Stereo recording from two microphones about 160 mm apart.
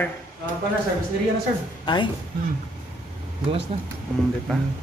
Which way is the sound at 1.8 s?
30° left (ahead or behind).